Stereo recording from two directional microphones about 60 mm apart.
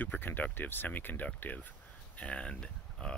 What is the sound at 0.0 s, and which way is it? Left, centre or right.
Speech, left.